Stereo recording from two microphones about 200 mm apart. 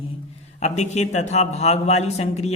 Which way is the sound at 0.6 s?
35° left (ahead or behind).